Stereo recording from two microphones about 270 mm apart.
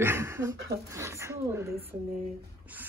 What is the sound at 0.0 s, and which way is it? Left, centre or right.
Speech, centre.